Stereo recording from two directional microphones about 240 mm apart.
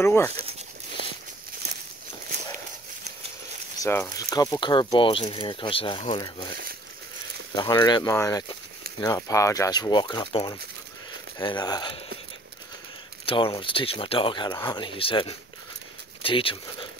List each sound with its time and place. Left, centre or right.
0.0 s speech: centre
3.7 s speech: centre
7.5 s speech: centre
13.2 s speech: left